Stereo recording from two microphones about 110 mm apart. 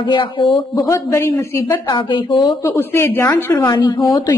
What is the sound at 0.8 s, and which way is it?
Speech, 25° left (ahead or behind).